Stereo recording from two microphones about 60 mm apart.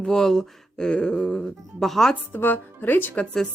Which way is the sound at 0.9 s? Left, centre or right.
Centre.